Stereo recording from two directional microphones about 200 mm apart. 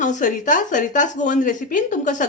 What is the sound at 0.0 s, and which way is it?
Speech, 40° left (ahead or behind).